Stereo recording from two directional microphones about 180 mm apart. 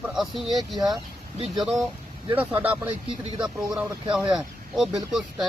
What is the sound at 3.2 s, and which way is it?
Speech, 30° right (ahead or behind).